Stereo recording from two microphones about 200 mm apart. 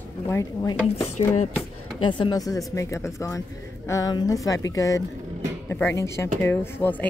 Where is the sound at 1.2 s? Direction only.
30° left (ahead or behind).